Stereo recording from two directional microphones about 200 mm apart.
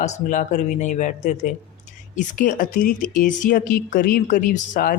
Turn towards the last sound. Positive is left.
turn(degrees=40)  # may be behind; listen again after turning